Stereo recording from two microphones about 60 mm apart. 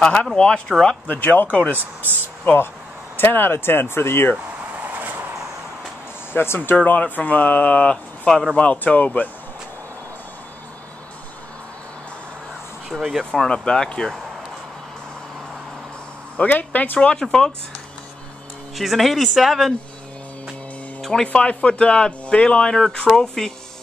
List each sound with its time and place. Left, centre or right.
0.0 s speech: centre
1.0 s speech: left
3.2 s speech: left
6.3 s speech: left
6.8 s speech: left
13.2 s speech: centre
16.3 s speech: left
17.0 s speech: centre
18.8 s speech: centre
21.0 s speech: centre